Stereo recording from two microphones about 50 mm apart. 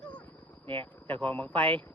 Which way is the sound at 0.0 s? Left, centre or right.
Left.